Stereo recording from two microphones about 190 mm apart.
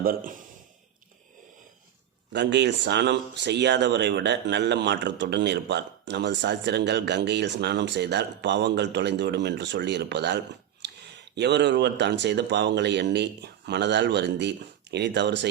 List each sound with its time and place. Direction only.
0.0 s a man's voice: 50° right (ahead or behind)
2.3 s speech: 65° right (ahead or behind)